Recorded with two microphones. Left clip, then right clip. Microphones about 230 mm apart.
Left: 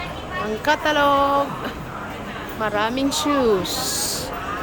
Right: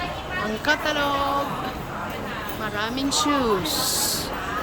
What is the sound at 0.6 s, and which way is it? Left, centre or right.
Speech, centre.